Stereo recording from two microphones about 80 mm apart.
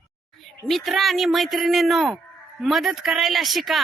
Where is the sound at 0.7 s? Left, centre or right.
Centre.